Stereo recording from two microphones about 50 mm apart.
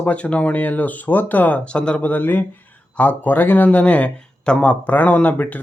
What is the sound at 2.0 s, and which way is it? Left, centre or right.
Speech, left.